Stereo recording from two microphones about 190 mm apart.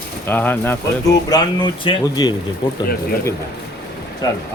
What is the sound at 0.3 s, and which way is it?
Speech, 10° left (ahead or behind).